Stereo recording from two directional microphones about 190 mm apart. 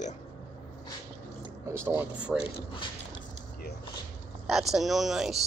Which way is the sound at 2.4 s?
25° left (ahead or behind).